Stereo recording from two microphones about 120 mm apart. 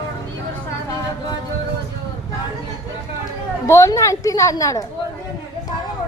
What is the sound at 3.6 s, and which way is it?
A woman's voice, 25° left (ahead or behind).